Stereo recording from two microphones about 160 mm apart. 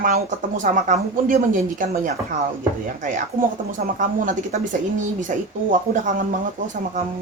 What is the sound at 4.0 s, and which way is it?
Speech, 55° right (ahead or behind).